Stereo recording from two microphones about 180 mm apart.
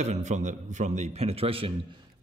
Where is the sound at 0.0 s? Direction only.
40° right (ahead or behind).